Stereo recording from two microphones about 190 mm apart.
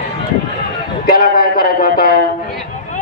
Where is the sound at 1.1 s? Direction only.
50° left (ahead or behind).